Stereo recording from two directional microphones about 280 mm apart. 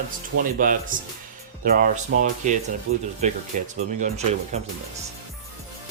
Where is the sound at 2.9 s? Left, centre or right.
Right.